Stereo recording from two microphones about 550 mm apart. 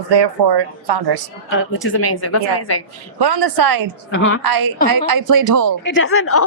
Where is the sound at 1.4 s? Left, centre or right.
Left.